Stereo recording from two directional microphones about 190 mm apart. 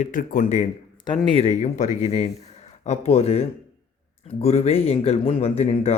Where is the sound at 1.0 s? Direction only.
30° left (ahead or behind).